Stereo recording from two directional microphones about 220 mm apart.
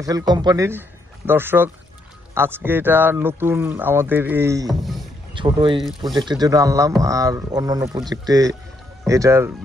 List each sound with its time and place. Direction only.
0.0 s speech: 15° right (ahead or behind)
4.6 s speech: centre (ahead or behind)
5.3 s speech: 20° right (ahead or behind)